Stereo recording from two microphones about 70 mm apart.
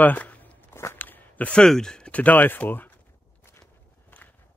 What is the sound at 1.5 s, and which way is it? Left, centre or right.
Speech, centre.